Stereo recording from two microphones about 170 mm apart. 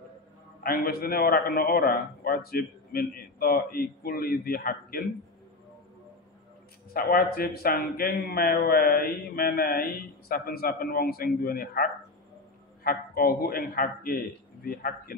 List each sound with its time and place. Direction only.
0.7 s a man's voice: 65° left (ahead or behind)
6.9 s a man's voice: 65° left (ahead or behind)